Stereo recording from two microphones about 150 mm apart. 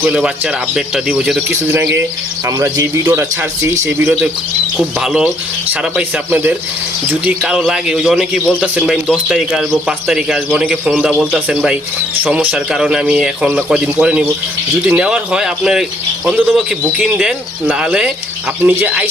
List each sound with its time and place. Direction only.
0.0 s speech: 5° right (ahead or behind)
2.5 s speech: 20° right (ahead or behind)
4.9 s a man's voice: 5° right (ahead or behind)